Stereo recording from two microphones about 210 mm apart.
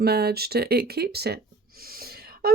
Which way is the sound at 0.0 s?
50° right (ahead or behind).